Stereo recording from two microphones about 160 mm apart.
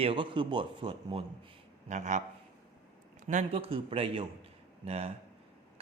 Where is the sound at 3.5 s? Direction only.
35° right (ahead or behind).